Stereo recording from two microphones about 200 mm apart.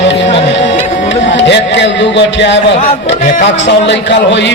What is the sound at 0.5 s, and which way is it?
Speech, 65° left (ahead or behind).